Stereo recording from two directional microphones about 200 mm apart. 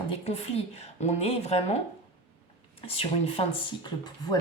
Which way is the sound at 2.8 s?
30° left (ahead or behind).